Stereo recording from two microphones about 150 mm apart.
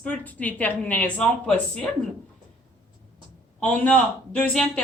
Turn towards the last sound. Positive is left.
turn(degrees=10)  # may be behind; listen again after turning